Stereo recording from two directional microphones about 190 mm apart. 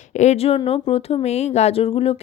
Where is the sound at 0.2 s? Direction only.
35° left (ahead or behind).